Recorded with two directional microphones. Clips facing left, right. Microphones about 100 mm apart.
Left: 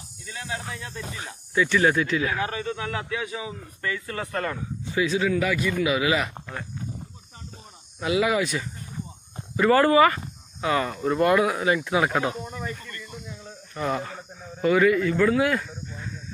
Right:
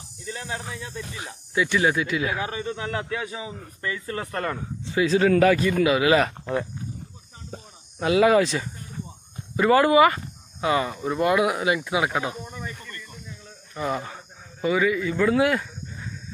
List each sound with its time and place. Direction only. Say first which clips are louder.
0.7 s speech: right 1 dB; 20° right (ahead or behind)
3.1 s speech: even; 30° right (ahead or behind)
5.2 s a man's voice: right 6 dB; 50° right (ahead or behind)
8.0 s a man's voice: right 5 dB; 35° right (ahead or behind)
9.6 s speech: right 1 dB; 15° right (ahead or behind); by 12.6 s centre (ahead or behind)
13.7 s speech: even; 5° right (ahead or behind)
15.3 s speech: right 2 dB; 25° right (ahead or behind)